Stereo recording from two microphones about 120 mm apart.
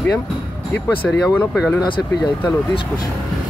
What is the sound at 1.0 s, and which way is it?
Speech, centre (ahead or behind).